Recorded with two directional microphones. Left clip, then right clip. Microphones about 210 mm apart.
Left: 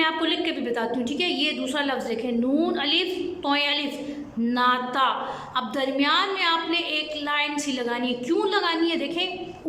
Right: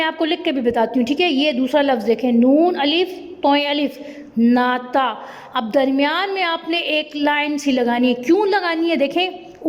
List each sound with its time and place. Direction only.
0.0 s a woman's voice: 35° right (ahead or behind)